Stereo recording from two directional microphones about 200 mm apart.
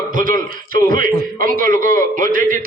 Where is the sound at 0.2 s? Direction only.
45° right (ahead or behind).